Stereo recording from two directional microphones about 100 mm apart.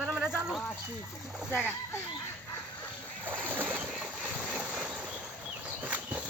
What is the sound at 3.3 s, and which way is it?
Boat, 20° right (ahead or behind).